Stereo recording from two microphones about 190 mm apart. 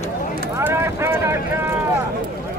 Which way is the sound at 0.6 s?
15° right (ahead or behind).